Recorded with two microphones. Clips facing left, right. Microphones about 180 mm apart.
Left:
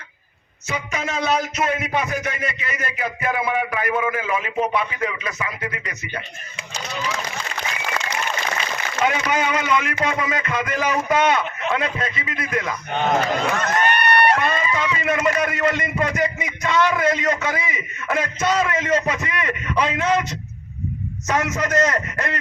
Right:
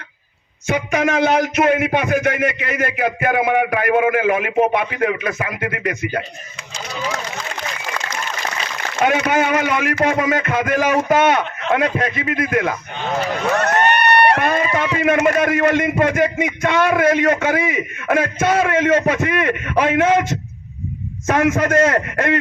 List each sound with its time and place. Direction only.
0.7 s a man's voice: 60° right (ahead or behind)
9.0 s speech: 55° right (ahead or behind)
13.6 s a man's voice: 70° right (ahead or behind)